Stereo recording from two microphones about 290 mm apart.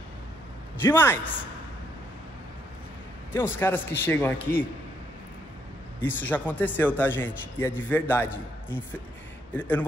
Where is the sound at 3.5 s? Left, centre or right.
Centre.